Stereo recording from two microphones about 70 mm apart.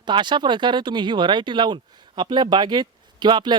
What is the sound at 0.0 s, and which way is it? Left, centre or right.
Speech, right.